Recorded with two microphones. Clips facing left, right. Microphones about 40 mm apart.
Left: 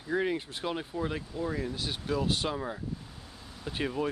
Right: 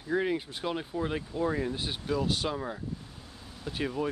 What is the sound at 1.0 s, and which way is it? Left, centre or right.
Speech, centre.